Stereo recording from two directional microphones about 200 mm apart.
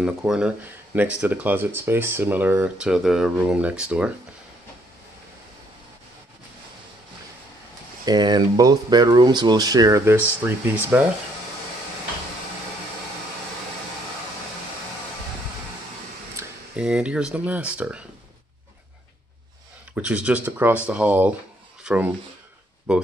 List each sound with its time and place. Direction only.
0.0 s speech: 5° right (ahead or behind)
8.0 s speech: 20° right (ahead or behind)
16.3 s speech: 5° right (ahead or behind)
20.0 s speech: 5° right (ahead or behind)